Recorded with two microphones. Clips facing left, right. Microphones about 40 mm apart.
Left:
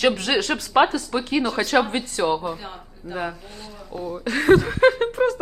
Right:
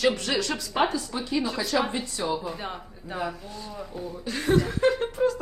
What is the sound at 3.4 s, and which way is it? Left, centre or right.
Speech, left.